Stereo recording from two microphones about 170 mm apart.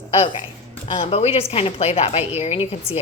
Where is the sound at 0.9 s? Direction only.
35° left (ahead or behind).